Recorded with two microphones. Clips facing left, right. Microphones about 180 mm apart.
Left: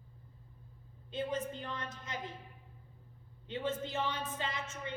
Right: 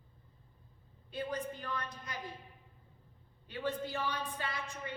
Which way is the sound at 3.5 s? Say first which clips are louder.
Even; 20° left (ahead or behind).